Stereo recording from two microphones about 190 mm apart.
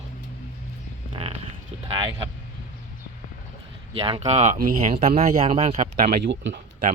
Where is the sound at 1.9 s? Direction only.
30° right (ahead or behind).